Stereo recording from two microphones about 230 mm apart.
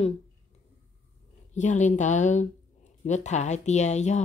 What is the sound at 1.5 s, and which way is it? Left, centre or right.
Speech, left.